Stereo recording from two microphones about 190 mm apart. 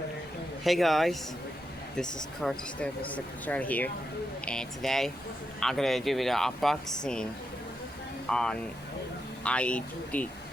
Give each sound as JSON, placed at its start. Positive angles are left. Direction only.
{"t": 0.6, "sound": "speech", "side_deg": 0}
{"t": 8.3, "sound": "speech", "side_deg": 5}